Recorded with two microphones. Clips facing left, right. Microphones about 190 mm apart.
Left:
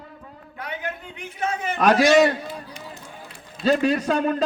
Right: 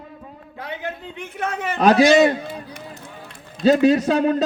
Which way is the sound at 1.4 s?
60° right (ahead or behind).